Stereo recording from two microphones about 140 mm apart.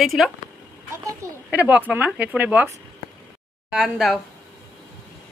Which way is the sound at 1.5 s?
10° right (ahead or behind).